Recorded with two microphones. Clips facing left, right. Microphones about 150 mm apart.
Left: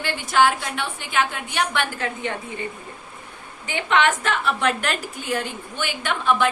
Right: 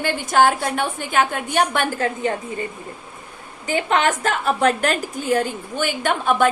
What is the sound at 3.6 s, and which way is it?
A woman's voice, 40° right (ahead or behind).